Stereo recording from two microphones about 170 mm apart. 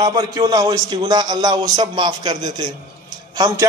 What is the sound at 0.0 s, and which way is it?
A man's voice, 25° right (ahead or behind).